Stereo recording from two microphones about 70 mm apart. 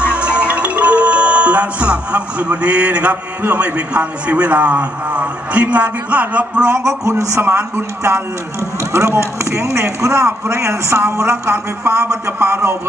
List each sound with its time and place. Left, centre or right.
0.1 s speech: centre
6.7 s speech: right
7.4 s a man's voice: right